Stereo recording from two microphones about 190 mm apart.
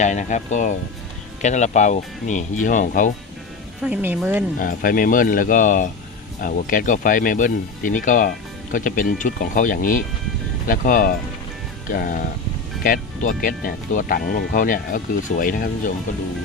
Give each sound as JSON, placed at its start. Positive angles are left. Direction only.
{"t": 0.0, "sound": "speech", "side_deg": 40}
{"t": 3.8, "sound": "speech", "side_deg": -10}
{"t": 4.6, "sound": "speech", "side_deg": 45}